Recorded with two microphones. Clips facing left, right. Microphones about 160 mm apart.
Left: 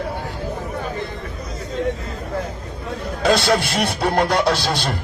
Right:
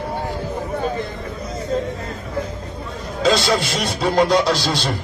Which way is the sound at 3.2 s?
60° left (ahead or behind).